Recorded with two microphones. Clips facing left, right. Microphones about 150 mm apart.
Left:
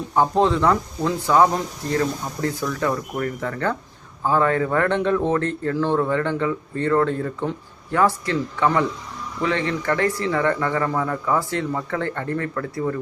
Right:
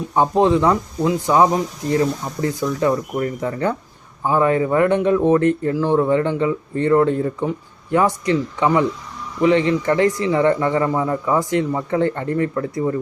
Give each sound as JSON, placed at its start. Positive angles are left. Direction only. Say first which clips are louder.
{"t": 0.1, "sound": "speech", "louder": "right 3 dB", "side_deg": -15}